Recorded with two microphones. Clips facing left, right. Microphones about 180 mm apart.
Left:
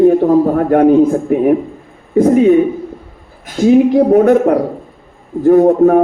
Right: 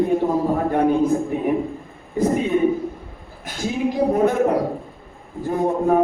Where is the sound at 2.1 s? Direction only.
65° left (ahead or behind).